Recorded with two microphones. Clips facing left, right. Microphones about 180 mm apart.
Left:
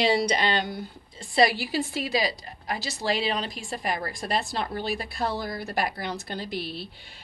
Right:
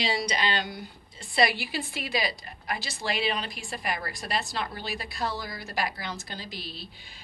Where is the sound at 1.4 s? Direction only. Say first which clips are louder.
Left 4 dB; 40° left (ahead or behind).